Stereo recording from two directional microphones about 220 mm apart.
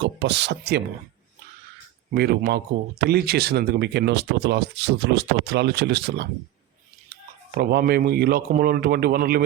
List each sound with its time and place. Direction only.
0.0 s speech: 55° right (ahead or behind)
2.1 s speech: 50° right (ahead or behind)
7.5 s speech: 45° right (ahead or behind)